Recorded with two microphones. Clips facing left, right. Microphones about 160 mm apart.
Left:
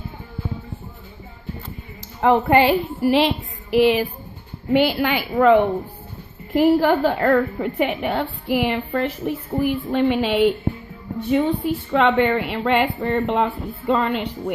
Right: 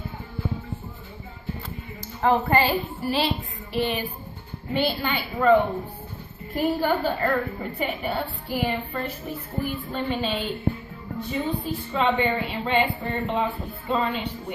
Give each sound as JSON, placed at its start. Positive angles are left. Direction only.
{"t": 2.2, "sound": "a woman's voice", "side_deg": 80}